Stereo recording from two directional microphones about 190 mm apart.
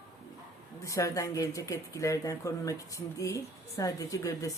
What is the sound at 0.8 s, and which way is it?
Speech, 15° left (ahead or behind).